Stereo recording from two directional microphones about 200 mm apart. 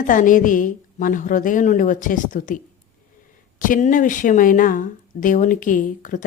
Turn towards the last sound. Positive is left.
turn(degrees=40)  # may be behind; listen again after turning